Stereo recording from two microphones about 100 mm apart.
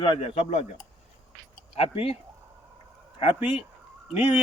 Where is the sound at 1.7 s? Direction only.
80° left.